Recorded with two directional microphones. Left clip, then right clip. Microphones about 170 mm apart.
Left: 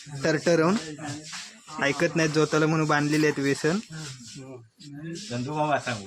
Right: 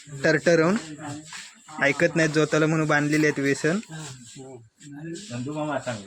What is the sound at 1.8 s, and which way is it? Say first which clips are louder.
Speech: right 3 dB; 5° right (ahead or behind).